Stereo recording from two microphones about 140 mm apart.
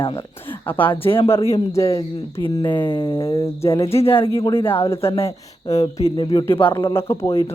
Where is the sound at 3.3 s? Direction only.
20° left (ahead or behind).